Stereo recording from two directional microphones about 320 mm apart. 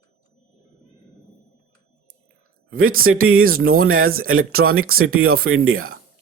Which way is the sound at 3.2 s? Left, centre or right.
Right.